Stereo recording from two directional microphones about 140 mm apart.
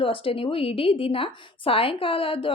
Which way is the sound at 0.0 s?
40° left (ahead or behind).